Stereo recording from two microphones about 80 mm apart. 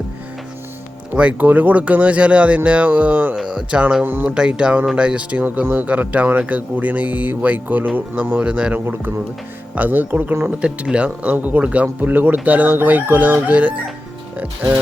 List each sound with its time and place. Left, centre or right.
1.1 s speech: centre
4.4 s speech: centre
10.4 s speech: centre